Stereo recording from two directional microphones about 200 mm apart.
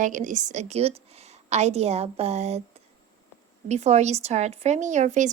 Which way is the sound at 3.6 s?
35° right (ahead or behind).